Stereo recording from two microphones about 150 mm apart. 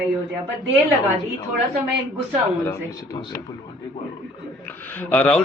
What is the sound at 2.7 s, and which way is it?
Speech, 25° left (ahead or behind).